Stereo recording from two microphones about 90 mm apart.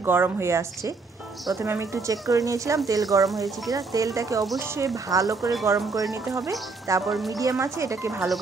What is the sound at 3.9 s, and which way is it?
A woman's voice, 40° right (ahead or behind).